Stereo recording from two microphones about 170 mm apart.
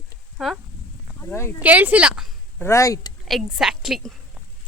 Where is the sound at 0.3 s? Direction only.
Centre (ahead or behind).